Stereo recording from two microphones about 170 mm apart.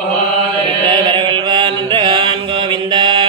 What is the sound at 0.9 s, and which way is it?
Chant, 30° right (ahead or behind).